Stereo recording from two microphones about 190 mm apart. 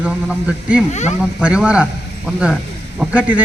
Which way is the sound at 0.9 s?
35° left (ahead or behind).